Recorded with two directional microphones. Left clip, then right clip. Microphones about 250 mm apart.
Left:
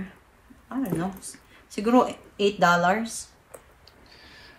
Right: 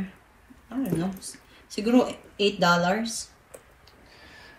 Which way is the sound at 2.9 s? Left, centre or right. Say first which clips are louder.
Left 2 dB; left.